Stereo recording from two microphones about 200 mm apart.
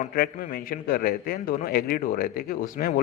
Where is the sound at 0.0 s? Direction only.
45° left (ahead or behind).